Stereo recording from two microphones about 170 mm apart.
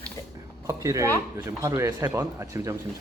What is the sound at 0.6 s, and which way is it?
Speech, 20° right (ahead or behind).